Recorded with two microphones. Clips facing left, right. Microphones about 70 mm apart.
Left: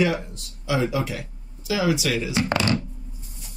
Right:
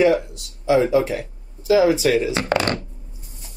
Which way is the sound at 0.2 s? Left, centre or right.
Left.